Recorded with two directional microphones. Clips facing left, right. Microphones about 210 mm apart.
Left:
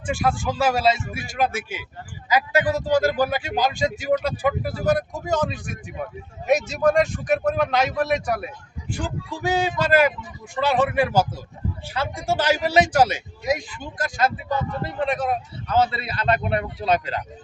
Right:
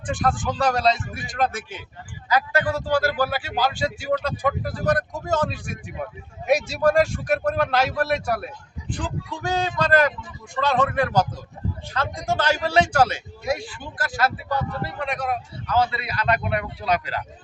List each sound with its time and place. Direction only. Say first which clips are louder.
0.2 s speech: even; 5° left (ahead or behind)
6.5 s a man's voice: even; 10° right (ahead or behind)
9.0 s speech: left 2 dB; 15° left (ahead or behind)